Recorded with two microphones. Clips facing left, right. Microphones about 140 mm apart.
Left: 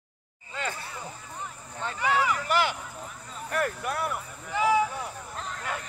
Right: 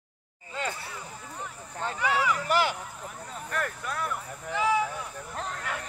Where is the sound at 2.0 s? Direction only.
Centre (ahead or behind).